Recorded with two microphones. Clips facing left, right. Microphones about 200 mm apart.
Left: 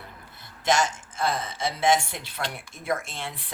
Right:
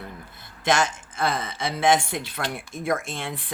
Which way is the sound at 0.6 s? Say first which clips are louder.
Right 1 dB; 55° right (ahead or behind).